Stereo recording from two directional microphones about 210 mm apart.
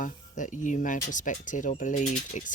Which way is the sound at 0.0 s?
35° left (ahead or behind).